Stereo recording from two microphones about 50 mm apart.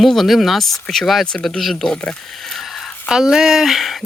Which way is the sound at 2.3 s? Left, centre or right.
Centre.